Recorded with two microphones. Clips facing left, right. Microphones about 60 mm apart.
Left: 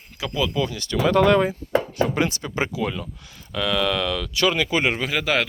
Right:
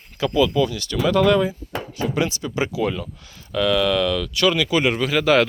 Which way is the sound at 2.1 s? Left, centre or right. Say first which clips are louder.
Right 1 dB; left.